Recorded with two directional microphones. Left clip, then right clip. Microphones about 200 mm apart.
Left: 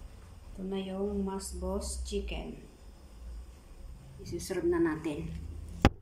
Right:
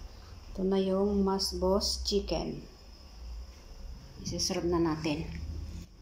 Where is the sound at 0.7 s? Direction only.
30° right (ahead or behind).